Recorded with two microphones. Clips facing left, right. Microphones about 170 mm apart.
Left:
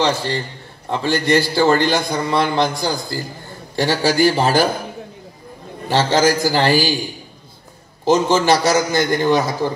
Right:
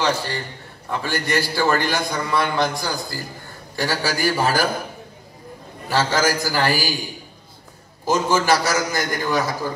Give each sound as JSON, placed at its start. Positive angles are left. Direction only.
{"t": 0.8, "sound": "a man's voice", "side_deg": 25}
{"t": 5.9, "sound": "a man's voice", "side_deg": 25}
{"t": 8.0, "sound": "a man's voice", "side_deg": 25}